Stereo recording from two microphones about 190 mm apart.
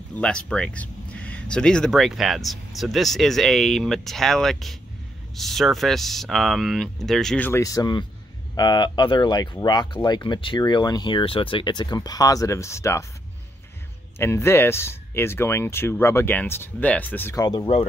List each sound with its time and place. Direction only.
0.1 s speech: 5° left (ahead or behind)
14.1 s speech: 15° left (ahead or behind)